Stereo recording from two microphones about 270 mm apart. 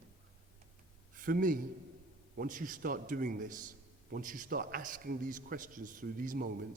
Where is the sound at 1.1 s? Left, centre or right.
Right.